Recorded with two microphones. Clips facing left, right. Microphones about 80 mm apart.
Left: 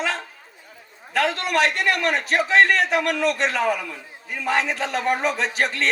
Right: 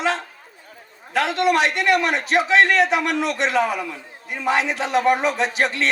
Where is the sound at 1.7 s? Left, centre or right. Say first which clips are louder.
Right 3 dB; right.